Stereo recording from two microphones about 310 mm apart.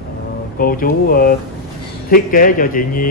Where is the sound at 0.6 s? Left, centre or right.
Left.